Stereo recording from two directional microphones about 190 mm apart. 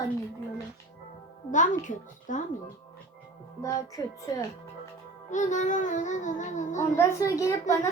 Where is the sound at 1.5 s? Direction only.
40° left (ahead or behind).